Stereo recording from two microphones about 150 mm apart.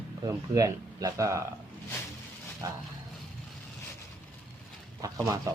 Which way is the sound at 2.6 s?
20° right (ahead or behind).